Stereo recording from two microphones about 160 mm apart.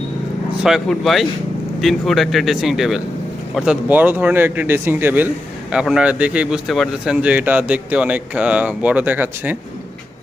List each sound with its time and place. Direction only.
0.6 s a man's voice: centre (ahead or behind)